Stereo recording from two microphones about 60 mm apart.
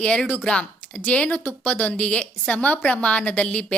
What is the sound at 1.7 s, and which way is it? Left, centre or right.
A woman's voice, left.